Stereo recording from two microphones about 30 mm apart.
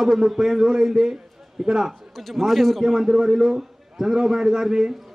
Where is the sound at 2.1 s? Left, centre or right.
Centre.